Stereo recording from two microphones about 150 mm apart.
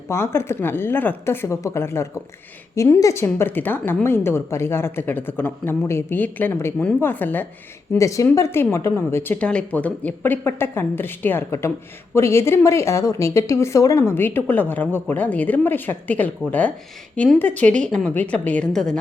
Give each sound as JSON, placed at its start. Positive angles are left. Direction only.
{"t": 0.1, "sound": "speech", "side_deg": 15}